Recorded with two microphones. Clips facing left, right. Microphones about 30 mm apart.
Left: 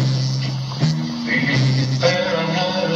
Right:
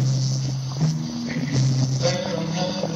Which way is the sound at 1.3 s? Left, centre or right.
Left.